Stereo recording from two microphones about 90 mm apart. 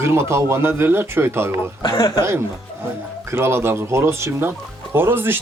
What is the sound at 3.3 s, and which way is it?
Speech, 30° right (ahead or behind).